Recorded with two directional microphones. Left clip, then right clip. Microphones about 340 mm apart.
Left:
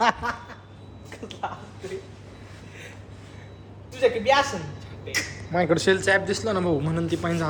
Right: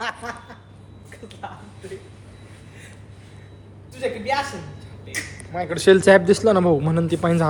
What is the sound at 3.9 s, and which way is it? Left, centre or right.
Speech, centre.